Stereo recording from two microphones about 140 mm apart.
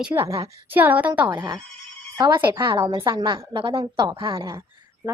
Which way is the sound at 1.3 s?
30° right (ahead or behind).